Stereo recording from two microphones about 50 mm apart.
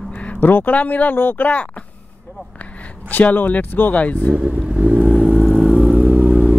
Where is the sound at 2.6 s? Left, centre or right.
Left.